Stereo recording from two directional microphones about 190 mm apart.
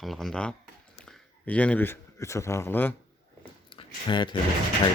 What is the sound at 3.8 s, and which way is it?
Speech, 25° left (ahead or behind).